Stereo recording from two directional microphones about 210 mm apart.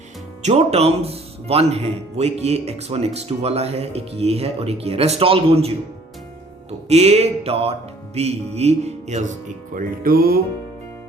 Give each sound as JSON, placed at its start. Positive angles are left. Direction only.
{"t": 0.4, "sound": "speech", "side_deg": -30}
{"t": 6.8, "sound": "speech", "side_deg": -30}
{"t": 9.7, "sound": "music", "side_deg": -45}